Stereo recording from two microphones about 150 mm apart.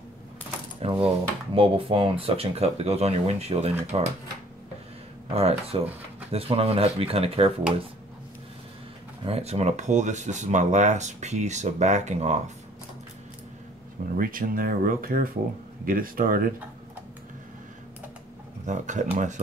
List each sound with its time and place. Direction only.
0.8 s speech: 40° right (ahead or behind)
5.3 s speech: 40° right (ahead or behind)
9.2 s speech: 45° right (ahead or behind)
14.0 s speech: 70° right (ahead or behind)
18.7 s speech: 55° right (ahead or behind)